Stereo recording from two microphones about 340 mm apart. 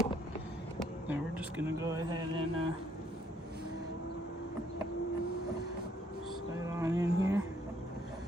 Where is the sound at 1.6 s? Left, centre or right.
Centre.